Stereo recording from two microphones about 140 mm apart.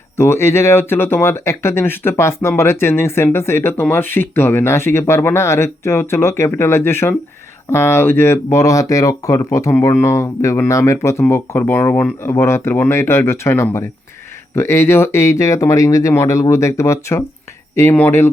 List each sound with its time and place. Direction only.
0.2 s speech: 15° left (ahead or behind)